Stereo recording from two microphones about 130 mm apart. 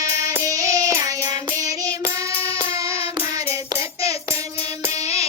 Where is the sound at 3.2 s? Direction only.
20° right (ahead or behind).